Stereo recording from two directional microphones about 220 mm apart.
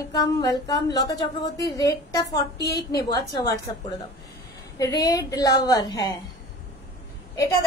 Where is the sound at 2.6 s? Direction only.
45° left (ahead or behind).